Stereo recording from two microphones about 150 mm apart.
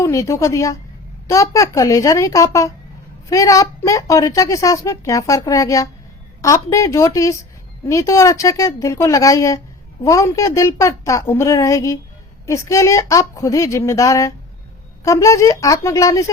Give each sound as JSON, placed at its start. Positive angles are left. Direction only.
{"t": 0.0, "sound": "a woman's voice", "side_deg": 20}